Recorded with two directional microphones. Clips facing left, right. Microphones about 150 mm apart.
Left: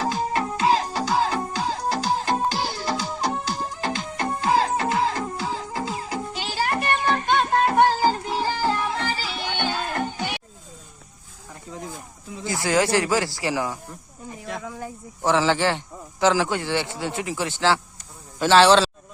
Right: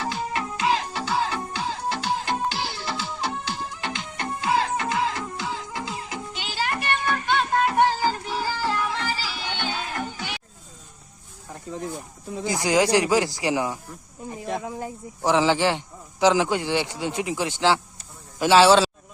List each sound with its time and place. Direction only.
0.0 s music: 40° left (ahead or behind)
9.0 s music: 45° left (ahead or behind)
12.5 s a man's voice: 20° right (ahead or behind)